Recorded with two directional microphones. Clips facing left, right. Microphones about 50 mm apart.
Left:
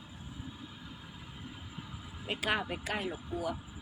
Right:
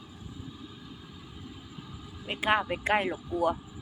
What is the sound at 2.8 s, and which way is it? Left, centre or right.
Speech, right.